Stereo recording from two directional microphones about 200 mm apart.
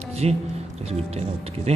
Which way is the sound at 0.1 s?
30° right (ahead or behind).